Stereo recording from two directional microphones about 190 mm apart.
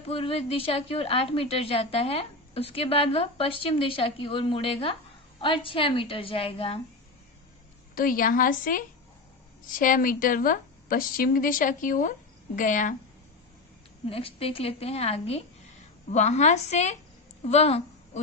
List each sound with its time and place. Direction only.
0.1 s a woman's voice: 30° left (ahead or behind)
7.9 s a woman's voice: 45° left (ahead or behind)
14.1 s a woman's voice: 30° left (ahead or behind)